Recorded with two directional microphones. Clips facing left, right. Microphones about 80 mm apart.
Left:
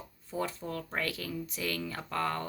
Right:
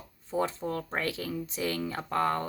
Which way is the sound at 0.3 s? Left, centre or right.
Right.